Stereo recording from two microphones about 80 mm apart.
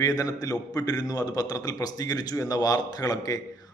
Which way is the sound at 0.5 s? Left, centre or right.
Centre.